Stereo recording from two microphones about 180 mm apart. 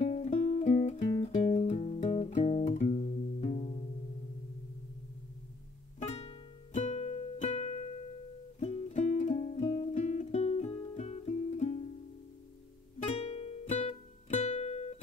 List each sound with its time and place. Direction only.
0.0 s music: 35° left (ahead or behind)
5.9 s music: 35° left (ahead or behind)
13.0 s music: 35° left (ahead or behind)